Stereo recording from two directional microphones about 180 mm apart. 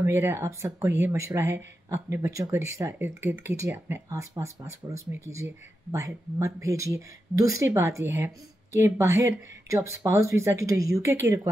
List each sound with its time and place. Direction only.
0.0 s speech: 15° right (ahead or behind)